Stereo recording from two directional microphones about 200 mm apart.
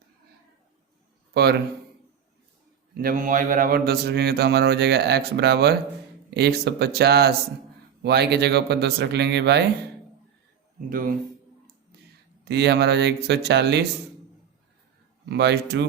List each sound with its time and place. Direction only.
1.3 s speech: 55° right (ahead or behind)
3.0 s speech: 45° right (ahead or behind)
10.8 s speech: 45° right (ahead or behind)
12.5 s speech: 55° right (ahead or behind)
15.3 s speech: 55° right (ahead or behind)